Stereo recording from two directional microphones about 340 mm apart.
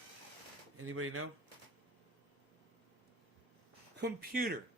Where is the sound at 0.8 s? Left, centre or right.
Right.